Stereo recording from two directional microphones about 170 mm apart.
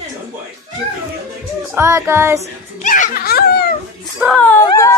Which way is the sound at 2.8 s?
50° left (ahead or behind).